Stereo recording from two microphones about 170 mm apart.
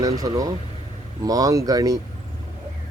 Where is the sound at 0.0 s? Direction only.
20° right (ahead or behind).